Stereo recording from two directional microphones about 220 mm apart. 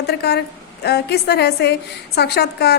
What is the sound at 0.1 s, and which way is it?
A woman's voice, 50° left (ahead or behind).